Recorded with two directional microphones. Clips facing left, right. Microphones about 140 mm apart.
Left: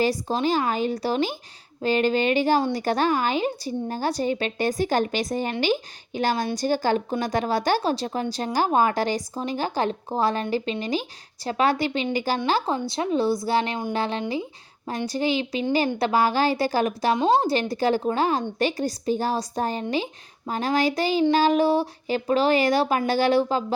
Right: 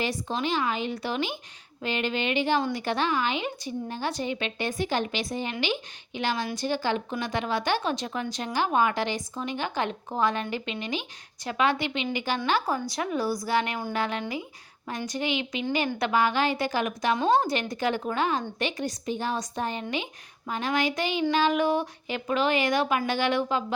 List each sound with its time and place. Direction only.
0.0 s a woman's voice: 35° left (ahead or behind)